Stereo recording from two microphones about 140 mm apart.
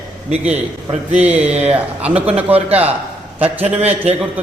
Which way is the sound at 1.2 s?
10° right (ahead or behind).